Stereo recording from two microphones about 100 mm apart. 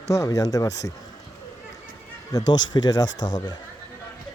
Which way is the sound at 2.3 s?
40° left (ahead or behind).